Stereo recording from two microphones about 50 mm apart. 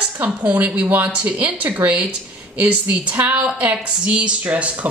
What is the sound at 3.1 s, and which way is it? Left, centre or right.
A woman's voice, right.